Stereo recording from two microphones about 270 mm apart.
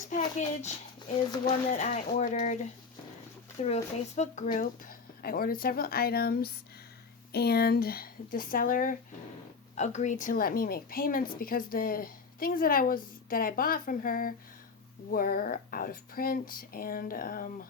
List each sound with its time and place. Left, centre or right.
0.1 s a woman's voice: left